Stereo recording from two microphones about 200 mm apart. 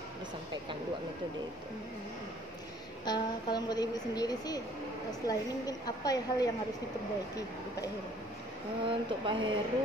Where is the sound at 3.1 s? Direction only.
20° left (ahead or behind).